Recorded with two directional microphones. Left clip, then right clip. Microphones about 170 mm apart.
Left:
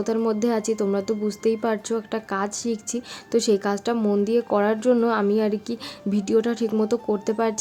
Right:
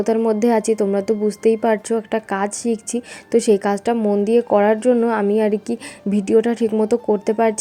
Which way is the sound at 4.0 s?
Centre (ahead or behind).